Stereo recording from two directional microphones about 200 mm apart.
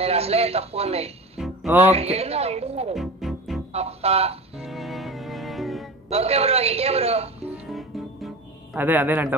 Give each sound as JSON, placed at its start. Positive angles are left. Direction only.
{"t": 0.0, "sound": "speech", "side_deg": -30}
{"t": 1.4, "sound": "music", "side_deg": -5}
{"t": 1.9, "sound": "speech", "side_deg": -30}
{"t": 2.9, "sound": "music", "side_deg": 0}
{"t": 3.7, "sound": "speech", "side_deg": -30}
{"t": 4.6, "sound": "music", "side_deg": 0}
{"t": 6.0, "sound": "speech", "side_deg": -30}
{"t": 7.4, "sound": "music", "side_deg": -5}
{"t": 8.7, "sound": "a man's voice", "side_deg": -10}